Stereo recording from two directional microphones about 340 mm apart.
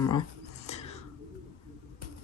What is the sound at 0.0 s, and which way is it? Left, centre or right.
Speech, centre.